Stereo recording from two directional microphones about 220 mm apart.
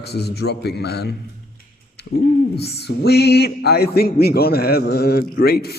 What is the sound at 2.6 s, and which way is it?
Speech, 50° left (ahead or behind).